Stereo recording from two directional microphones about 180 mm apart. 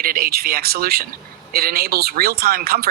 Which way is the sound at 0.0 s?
55° right (ahead or behind).